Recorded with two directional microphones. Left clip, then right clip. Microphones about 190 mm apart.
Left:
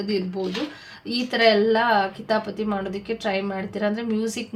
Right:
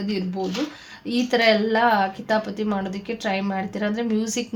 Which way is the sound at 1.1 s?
30° right (ahead or behind).